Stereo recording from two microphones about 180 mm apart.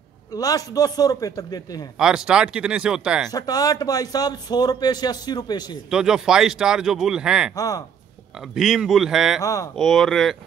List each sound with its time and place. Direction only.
0.3 s speech: 20° left (ahead or behind)
2.0 s speech: 5° right (ahead or behind)
3.3 s speech: 20° left (ahead or behind)
5.9 s speech: 5° right (ahead or behind)
7.5 s speech: 20° left (ahead or behind)
8.4 s speech: centre (ahead or behind)
9.4 s speech: 20° left (ahead or behind)
9.8 s speech: centre (ahead or behind)